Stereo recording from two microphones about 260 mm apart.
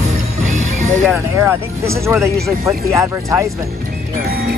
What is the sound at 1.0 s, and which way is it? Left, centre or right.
Speech, centre.